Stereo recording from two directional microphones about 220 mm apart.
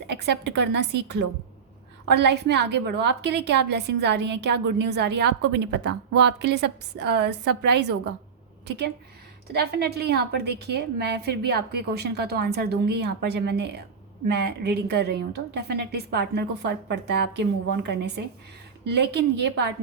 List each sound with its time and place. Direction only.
0.1 s a woman's voice: 50° right (ahead or behind)